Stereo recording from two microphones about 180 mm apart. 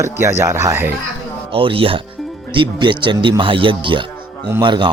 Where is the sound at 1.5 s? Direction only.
30° right (ahead or behind).